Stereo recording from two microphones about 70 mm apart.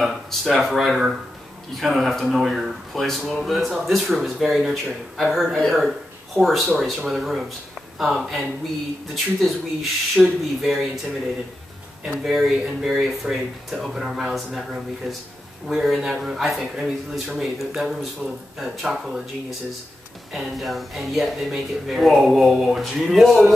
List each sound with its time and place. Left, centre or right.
0.0 s speech: centre
12.2 s speech: centre
20.3 s speech: centre